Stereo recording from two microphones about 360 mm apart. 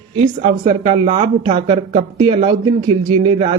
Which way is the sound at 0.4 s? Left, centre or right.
Centre.